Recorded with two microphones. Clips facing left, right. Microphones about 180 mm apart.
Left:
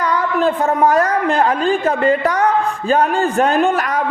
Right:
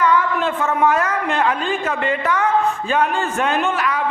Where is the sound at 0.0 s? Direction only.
40° left (ahead or behind).